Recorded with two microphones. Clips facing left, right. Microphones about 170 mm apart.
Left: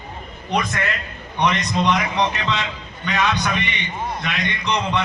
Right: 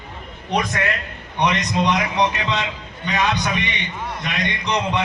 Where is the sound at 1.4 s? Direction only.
15° right (ahead or behind).